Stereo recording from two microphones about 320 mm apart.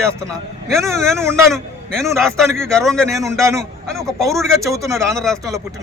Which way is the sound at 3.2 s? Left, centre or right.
Centre.